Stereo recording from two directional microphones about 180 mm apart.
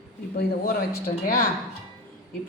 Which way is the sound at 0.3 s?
55° left (ahead or behind).